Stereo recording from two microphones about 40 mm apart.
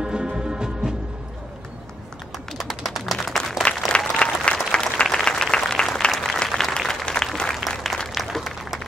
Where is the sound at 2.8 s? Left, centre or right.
Centre.